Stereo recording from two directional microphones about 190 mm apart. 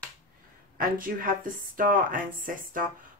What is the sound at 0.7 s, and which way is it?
Speech, 50° right (ahead or behind).